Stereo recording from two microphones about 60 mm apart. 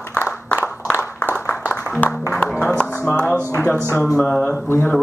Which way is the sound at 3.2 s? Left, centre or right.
Left.